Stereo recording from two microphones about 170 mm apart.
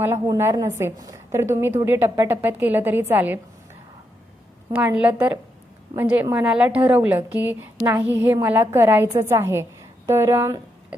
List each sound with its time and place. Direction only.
0.0 s a woman's voice: 15° right (ahead or behind)
4.7 s a woman's voice: 10° right (ahead or behind)